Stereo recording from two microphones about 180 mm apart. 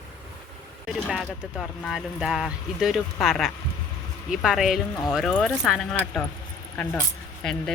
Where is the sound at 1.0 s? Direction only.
Centre (ahead or behind).